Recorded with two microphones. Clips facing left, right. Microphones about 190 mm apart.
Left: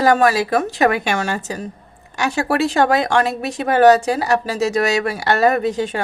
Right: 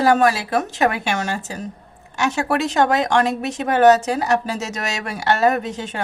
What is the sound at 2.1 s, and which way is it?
Speech, 35° left (ahead or behind).